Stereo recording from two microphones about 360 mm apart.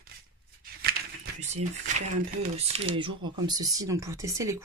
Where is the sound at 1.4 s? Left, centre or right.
Centre.